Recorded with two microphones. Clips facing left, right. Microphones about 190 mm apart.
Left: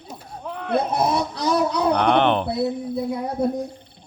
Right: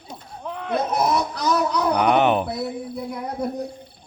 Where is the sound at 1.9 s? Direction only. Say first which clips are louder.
Right 1 dB; 10° right (ahead or behind).